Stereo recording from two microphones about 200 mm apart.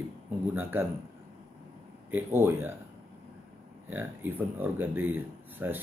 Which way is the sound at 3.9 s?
10° right (ahead or behind).